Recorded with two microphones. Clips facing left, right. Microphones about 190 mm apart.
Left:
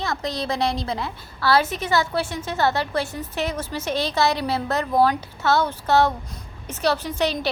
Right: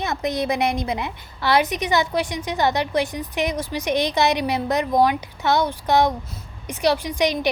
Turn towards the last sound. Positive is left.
turn(degrees=-15)  # may be behind; listen again after turning